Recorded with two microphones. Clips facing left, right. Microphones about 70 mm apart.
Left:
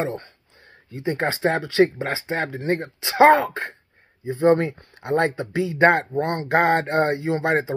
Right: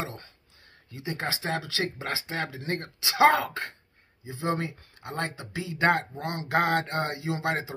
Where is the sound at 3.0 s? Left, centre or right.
Left.